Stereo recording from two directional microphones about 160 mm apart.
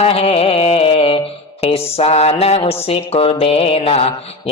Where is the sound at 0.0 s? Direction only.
40° left (ahead or behind).